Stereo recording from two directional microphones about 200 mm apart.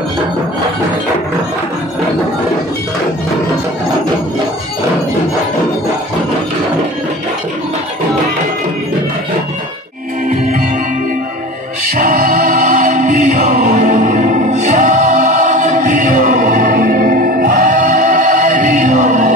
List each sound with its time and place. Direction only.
11.9 s choir: 45° right (ahead or behind)